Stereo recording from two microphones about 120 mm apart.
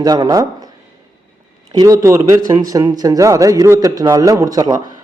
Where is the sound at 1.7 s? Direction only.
30° right (ahead or behind).